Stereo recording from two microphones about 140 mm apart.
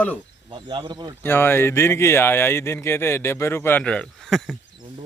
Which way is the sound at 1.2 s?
15° left (ahead or behind).